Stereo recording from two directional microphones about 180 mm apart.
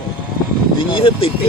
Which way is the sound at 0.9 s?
30° left (ahead or behind).